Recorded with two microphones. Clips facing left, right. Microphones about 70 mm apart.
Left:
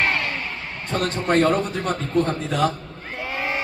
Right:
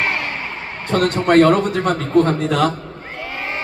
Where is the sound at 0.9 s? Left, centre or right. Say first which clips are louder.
Right 6 dB; right.